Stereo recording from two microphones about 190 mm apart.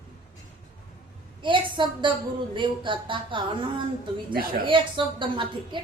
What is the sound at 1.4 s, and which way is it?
A woman's voice, 25° right (ahead or behind).